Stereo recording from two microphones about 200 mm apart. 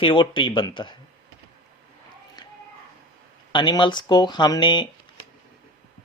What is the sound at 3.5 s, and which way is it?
Speech, 25° left (ahead or behind).